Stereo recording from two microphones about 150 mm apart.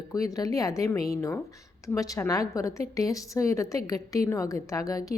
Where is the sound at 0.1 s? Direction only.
25° left (ahead or behind).